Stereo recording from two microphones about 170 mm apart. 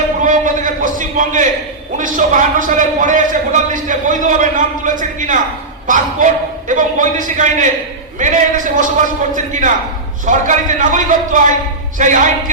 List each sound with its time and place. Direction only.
0.2 s a sound: 50° right (ahead or behind)
2.0 s a man's voice: 50° right (ahead or behind)
6.7 s a man's voice: 50° right (ahead or behind)